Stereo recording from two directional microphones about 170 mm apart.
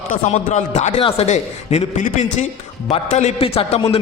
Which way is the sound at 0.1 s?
45° left (ahead or behind).